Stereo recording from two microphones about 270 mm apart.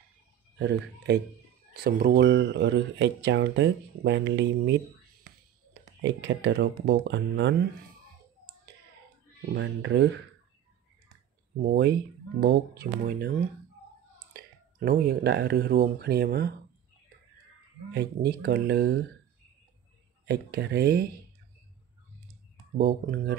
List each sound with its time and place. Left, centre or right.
0.6 s speech: right
5.9 s speech: right
9.5 s speech: right
11.7 s speech: right
14.3 s speech: right
17.9 s speech: right
20.2 s speech: right
22.8 s speech: right